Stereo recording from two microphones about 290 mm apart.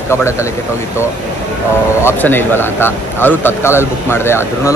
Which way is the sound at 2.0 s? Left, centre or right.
Centre.